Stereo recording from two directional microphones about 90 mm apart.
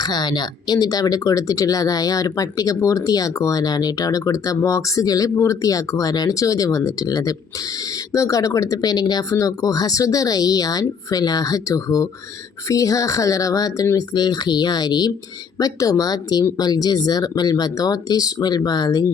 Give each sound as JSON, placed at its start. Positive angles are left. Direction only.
{"t": 0.0, "sound": "speech", "side_deg": 50}